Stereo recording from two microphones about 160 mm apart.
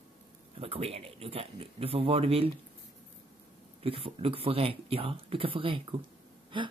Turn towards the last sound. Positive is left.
turn(degrees=-30)  # may be behind; listen again after turning